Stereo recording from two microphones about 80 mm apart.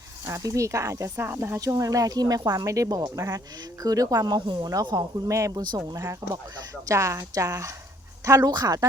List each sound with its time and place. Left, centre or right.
0.3 s speech: right
1.1 s speech: right
1.8 s speech: right
4.4 s speech: right
4.9 s speech: right